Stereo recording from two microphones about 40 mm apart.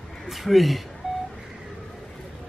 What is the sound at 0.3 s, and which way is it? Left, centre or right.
Speech, centre.